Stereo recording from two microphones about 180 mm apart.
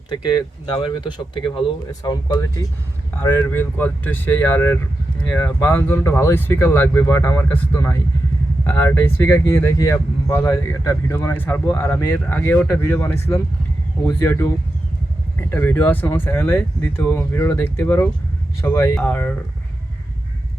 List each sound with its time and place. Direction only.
0.2 s speech: 25° left (ahead or behind); by 19.4 s 10° left (ahead or behind)